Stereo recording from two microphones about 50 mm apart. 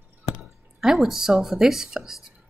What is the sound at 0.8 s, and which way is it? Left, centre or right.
A woman's voice, centre.